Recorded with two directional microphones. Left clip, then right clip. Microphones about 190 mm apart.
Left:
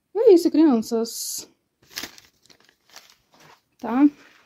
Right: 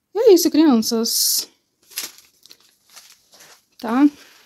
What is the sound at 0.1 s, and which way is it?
Speech, centre (ahead or behind).